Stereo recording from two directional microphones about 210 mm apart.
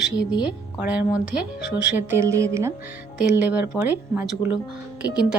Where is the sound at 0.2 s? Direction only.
20° left (ahead or behind).